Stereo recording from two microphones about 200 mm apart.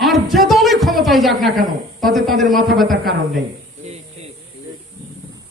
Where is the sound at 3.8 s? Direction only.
35° right (ahead or behind).